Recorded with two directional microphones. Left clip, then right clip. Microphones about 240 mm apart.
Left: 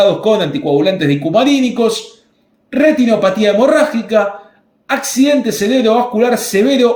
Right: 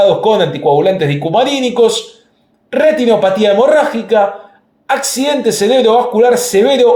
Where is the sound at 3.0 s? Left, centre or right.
Right.